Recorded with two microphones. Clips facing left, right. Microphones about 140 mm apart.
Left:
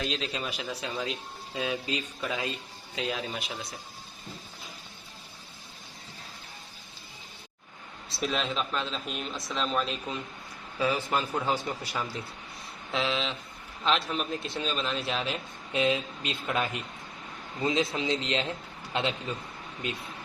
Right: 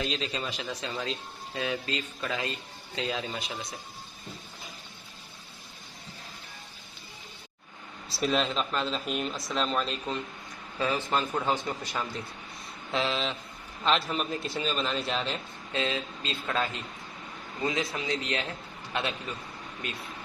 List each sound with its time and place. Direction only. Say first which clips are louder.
0.0 s a man's voice: even; centre (ahead or behind)
2.9 s a man's voice: even; 5° left (ahead or behind)
8.1 s a man's voice: right 3 dB; centre (ahead or behind); by 19.4 s 20° left (ahead or behind)